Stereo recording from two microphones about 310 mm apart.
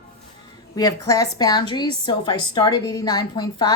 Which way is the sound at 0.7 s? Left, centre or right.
Centre.